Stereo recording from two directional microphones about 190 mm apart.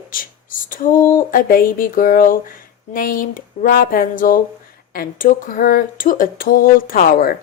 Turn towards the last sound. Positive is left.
turn(degrees=50)  # may be behind; listen again after turning